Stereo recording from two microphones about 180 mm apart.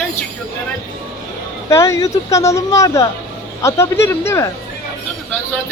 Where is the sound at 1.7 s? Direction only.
15° left (ahead or behind).